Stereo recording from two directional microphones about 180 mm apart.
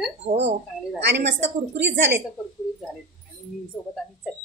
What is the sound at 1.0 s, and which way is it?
A woman's voice, 70° right (ahead or behind).